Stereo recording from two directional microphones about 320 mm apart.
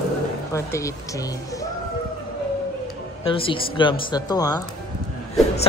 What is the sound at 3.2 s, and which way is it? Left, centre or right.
Speech, centre.